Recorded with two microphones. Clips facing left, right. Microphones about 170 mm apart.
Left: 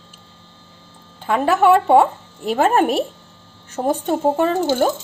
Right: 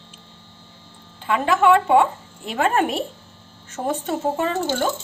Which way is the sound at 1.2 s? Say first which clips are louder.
Left 3 dB; 40° left (ahead or behind).